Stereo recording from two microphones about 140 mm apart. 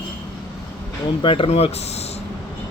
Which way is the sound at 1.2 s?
40° left (ahead or behind).